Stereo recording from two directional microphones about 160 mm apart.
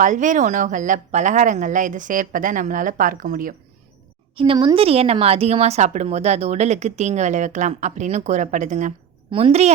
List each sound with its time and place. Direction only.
0.0 s a woman's voice: 50° right (ahead or behind)
4.4 s a woman's voice: 35° right (ahead or behind); by 8.9 s 50° right (ahead or behind)
9.3 s a woman's voice: 40° right (ahead or behind)